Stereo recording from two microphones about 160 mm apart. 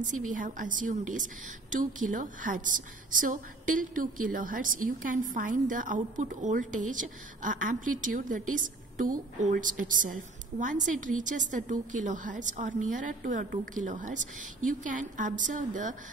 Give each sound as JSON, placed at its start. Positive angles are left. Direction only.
{"t": 0.0, "sound": "a woman's voice", "side_deg": -55}